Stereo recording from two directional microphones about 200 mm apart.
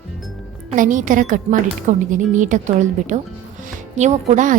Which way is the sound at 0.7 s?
40° right (ahead or behind).